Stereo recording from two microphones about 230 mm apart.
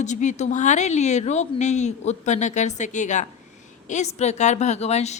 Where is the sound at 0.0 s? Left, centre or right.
Left.